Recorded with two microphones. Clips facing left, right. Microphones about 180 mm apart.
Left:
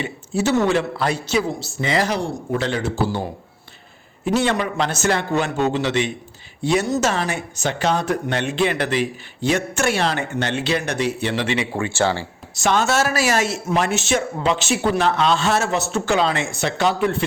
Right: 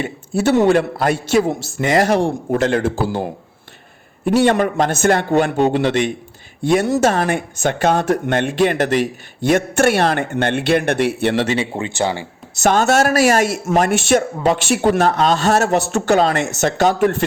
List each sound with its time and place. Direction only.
0.0 s speech: 55° right (ahead or behind)
11.5 s speech: 25° right (ahead or behind)
12.6 s speech: 45° right (ahead or behind)